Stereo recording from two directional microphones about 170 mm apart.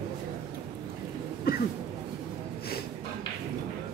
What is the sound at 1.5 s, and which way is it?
Speech, 65° left (ahead or behind).